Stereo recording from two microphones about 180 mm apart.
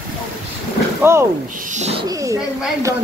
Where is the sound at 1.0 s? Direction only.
15° right (ahead or behind).